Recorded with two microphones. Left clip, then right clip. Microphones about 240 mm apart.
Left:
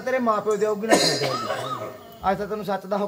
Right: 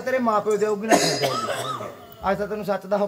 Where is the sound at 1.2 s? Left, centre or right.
Right.